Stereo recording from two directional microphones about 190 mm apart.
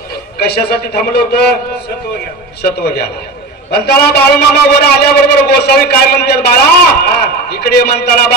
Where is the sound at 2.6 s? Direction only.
60° left (ahead or behind).